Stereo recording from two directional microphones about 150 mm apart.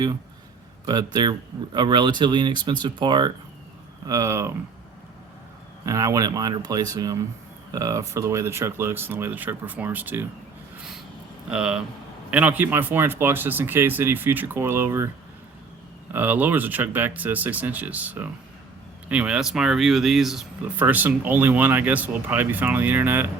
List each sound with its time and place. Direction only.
0.9 s speech: 25° right (ahead or behind)
5.8 s speech: 20° right (ahead or behind)
11.4 s speech: 5° right (ahead or behind)
16.1 s speech: 10° right (ahead or behind)